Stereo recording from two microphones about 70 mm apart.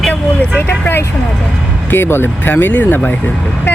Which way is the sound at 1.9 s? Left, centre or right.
Left.